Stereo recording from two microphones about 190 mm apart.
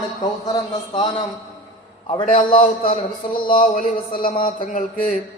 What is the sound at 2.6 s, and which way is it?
Speech, 50° left (ahead or behind).